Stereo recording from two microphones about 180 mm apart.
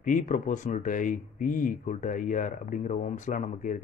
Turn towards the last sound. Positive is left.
turn(degrees=45)  # may be behind; listen again after turning